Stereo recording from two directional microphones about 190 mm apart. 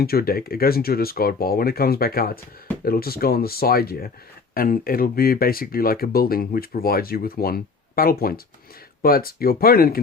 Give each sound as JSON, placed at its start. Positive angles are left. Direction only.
{"t": 0.0, "sound": "speech", "side_deg": 55}